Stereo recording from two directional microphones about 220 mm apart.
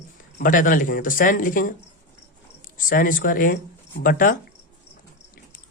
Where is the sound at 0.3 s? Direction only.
40° left (ahead or behind).